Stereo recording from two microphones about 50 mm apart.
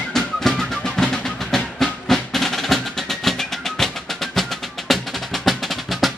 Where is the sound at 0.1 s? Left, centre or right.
Centre.